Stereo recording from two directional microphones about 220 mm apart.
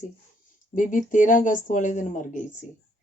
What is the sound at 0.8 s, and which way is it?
Speech, 35° left (ahead or behind).